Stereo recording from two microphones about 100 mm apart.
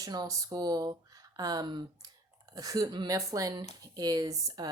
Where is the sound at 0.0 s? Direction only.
40° right (ahead or behind).